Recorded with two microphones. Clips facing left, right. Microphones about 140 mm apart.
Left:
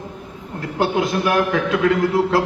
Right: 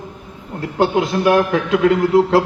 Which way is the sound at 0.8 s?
25° right (ahead or behind).